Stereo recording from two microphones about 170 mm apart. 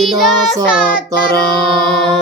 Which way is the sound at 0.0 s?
Centre (ahead or behind).